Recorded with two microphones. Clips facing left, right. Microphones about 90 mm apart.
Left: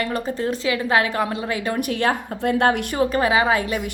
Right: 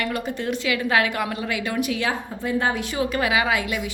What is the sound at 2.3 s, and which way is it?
Speech, 60° left (ahead or behind).